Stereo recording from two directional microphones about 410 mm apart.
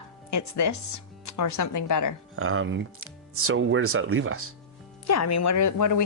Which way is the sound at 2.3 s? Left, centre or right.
Right.